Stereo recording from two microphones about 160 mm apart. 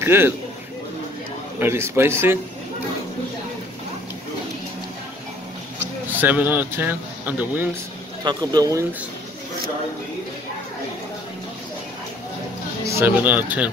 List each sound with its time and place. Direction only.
0.0 s a man's voice: 15° right (ahead or behind)
1.6 s speech: 15° right (ahead or behind)
6.2 s speech: 10° right (ahead or behind)
8.2 s speech: 25° right (ahead or behind)
12.8 s speech: 15° right (ahead or behind)